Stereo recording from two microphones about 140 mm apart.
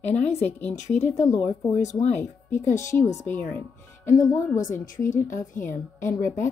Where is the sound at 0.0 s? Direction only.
55° left (ahead or behind).